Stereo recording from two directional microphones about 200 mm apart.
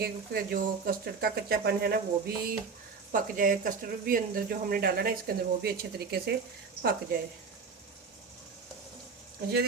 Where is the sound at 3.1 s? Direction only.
45° right (ahead or behind).